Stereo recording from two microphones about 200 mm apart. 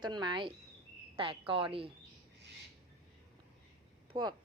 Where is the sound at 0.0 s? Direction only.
20° right (ahead or behind).